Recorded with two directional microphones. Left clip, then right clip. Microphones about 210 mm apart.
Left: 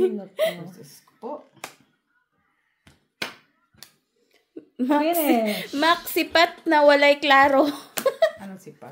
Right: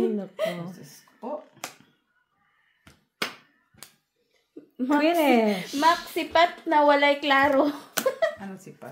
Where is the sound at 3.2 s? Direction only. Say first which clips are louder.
Right 1 dB; 5° left (ahead or behind).